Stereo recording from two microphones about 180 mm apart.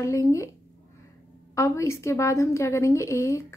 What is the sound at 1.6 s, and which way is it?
A woman's voice, 15° left (ahead or behind).